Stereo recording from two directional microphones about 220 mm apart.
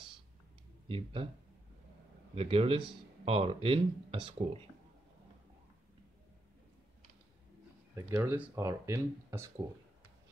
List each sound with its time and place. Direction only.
0.8 s speech: 25° right (ahead or behind)
2.3 s speech: 25° right (ahead or behind)
7.9 s speech: 10° right (ahead or behind)